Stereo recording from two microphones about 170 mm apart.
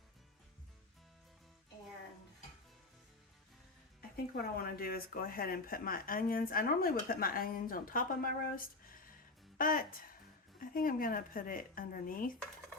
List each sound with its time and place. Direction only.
4.4 s speech: 65° left (ahead or behind)